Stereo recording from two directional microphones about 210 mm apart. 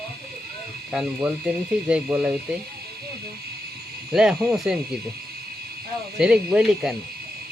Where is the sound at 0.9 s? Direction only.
5° right (ahead or behind).